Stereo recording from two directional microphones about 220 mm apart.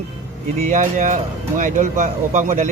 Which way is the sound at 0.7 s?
35° right (ahead or behind).